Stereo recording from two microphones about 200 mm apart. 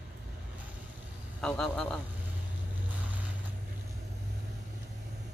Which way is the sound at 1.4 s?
5° left (ahead or behind).